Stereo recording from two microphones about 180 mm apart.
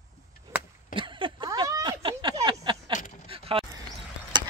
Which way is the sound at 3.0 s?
40° left (ahead or behind).